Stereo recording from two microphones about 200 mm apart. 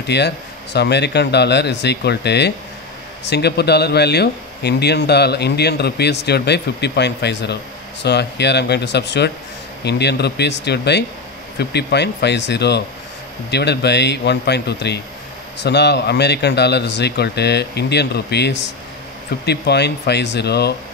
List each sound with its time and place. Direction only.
0.0 s a man's voice: 55° left (ahead or behind)